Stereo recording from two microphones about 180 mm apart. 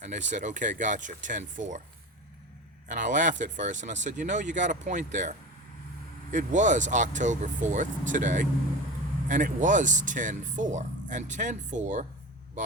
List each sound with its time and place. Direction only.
0.0 s speech: 40° right (ahead or behind)
2.8 s speech: 45° right (ahead or behind)